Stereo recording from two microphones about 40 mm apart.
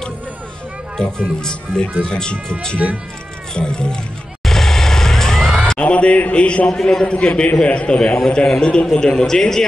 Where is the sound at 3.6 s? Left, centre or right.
Left.